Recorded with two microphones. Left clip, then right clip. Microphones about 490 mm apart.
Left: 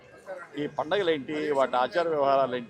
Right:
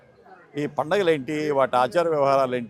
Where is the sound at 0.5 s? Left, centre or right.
Right.